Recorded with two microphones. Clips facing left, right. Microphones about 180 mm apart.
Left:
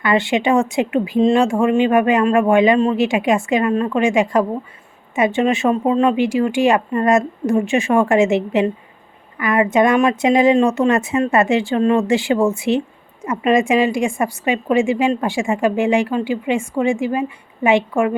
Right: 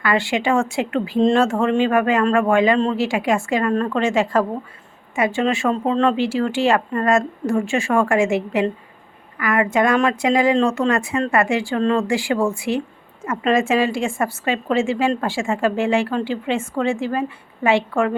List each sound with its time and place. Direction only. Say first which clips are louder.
0.0 s speech: left 3 dB; 20° left (ahead or behind)